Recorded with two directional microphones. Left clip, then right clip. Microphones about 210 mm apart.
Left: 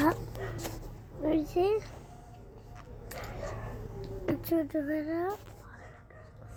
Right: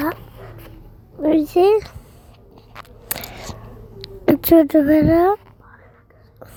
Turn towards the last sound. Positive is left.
turn(degrees=-45)  # may be behind; listen again after turning